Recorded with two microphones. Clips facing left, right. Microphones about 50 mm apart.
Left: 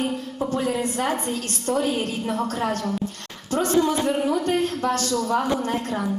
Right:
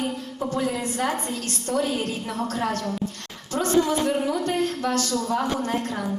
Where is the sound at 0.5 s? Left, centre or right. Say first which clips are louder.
Left 2 dB; left.